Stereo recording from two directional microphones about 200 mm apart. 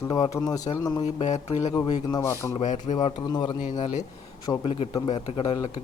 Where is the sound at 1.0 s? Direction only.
35° left (ahead or behind).